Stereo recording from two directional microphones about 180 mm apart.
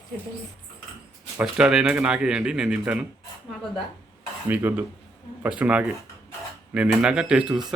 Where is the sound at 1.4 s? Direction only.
5° right (ahead or behind).